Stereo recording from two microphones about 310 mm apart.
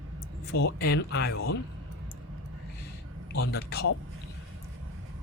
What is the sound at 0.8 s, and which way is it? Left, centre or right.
Speech, left.